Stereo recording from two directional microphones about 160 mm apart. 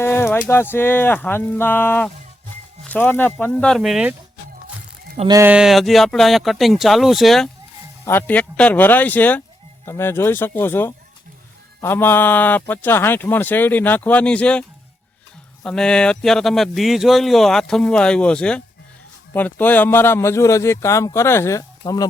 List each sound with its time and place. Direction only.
0.0 s speech: 15° left (ahead or behind); by 4.1 s 5° right (ahead or behind)
5.5 s speech: 5° right (ahead or behind)
8.0 s speech: 10° left (ahead or behind)
15.6 s speech: 5° left (ahead or behind); by 22.0 s 20° left (ahead or behind)